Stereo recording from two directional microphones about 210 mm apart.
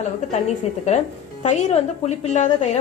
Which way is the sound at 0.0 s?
35° left (ahead or behind).